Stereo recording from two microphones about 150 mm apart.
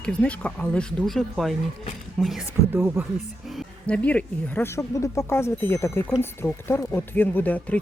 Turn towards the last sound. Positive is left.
turn(degrees=10)  # may be behind; listen again after turning